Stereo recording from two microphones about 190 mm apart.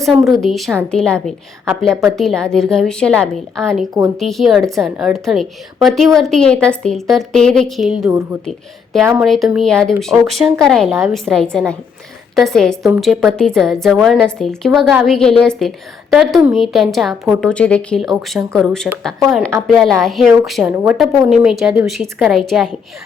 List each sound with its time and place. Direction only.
0.0 s a woman's voice: centre (ahead or behind)